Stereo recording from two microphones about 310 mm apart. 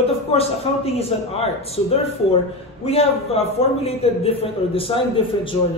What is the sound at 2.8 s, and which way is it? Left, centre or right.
A man's voice, centre.